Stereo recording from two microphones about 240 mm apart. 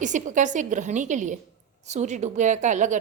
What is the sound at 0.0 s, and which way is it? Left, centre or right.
A woman's voice, right.